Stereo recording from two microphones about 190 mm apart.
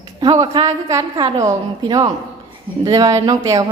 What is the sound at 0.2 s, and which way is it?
Speech, 20° right (ahead or behind).